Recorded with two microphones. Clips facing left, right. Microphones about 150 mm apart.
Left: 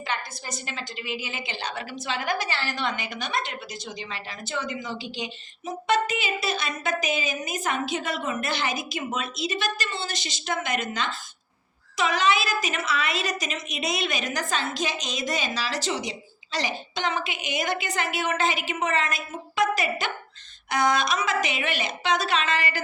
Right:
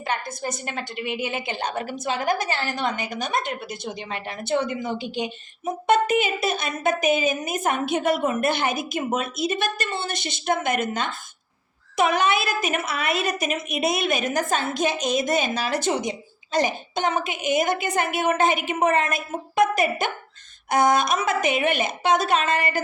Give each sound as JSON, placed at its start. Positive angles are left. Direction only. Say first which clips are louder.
{"t": 0.1, "sound": "a woman's voice", "louder": "right 6 dB", "side_deg": -50}